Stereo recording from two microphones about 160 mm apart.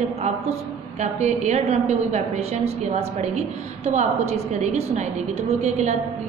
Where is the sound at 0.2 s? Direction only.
45° right (ahead or behind).